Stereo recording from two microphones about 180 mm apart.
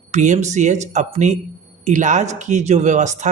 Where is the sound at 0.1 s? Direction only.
40° right (ahead or behind).